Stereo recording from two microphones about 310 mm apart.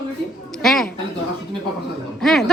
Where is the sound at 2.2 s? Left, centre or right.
Centre.